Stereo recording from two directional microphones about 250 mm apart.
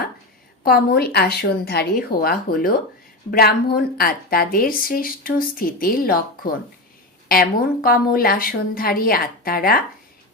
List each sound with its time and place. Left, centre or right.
0.6 s speech: left